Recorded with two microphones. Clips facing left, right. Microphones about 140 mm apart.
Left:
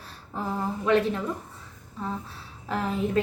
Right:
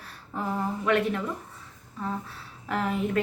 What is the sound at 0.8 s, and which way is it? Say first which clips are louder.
Speech: left 3 dB; 25° left (ahead or behind).